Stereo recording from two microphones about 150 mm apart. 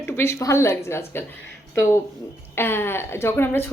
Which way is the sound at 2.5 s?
15° left (ahead or behind).